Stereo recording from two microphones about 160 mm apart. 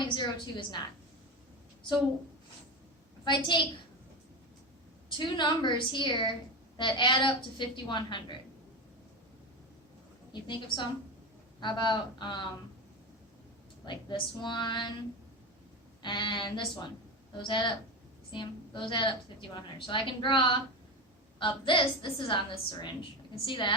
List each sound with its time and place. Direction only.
0.0 s a woman's voice: 30° left (ahead or behind)
3.2 s a woman's voice: 30° left (ahead or behind)
5.1 s a woman's voice: 30° left (ahead or behind)
10.4 s a woman's voice: 30° left (ahead or behind)
13.8 s a woman's voice: 30° left (ahead or behind)
16.0 s a woman's voice: 30° left (ahead or behind)